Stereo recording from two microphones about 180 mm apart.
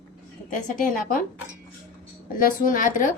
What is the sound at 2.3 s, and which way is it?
Speech, 50° left (ahead or behind).